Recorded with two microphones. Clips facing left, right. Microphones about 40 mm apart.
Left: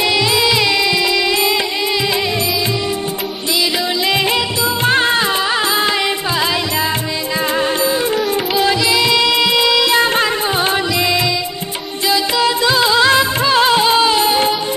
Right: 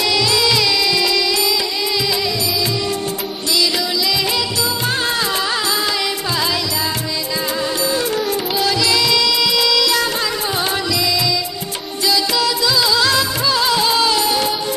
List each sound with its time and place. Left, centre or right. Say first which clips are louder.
0.1 s music: left 2 dB; left
4.8 s music: left 9 dB; left
8.8 s music: left 3 dB; left
12.1 s music: left 3 dB; left